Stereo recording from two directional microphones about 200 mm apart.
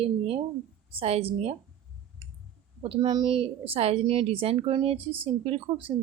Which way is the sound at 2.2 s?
25° right (ahead or behind).